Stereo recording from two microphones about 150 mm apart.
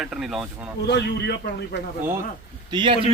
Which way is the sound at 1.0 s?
90° left.